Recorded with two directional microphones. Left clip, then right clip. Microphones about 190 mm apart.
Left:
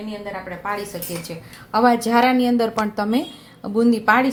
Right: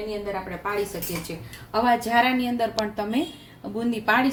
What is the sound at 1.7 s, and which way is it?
A woman's voice, 45° left (ahead or behind).